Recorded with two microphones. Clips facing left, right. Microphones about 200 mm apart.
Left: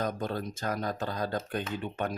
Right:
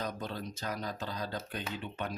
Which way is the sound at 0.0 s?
50° left (ahead or behind).